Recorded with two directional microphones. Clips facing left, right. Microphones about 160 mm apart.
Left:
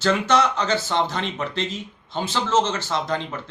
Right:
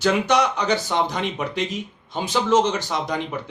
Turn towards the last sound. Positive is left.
turn(degrees=-15)  # may be behind; listen again after turning